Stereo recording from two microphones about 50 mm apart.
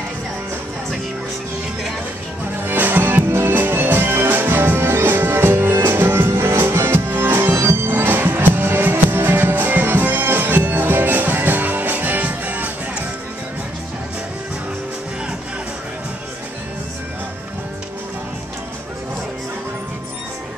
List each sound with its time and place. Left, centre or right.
2.6 s music: right
3.3 s music: right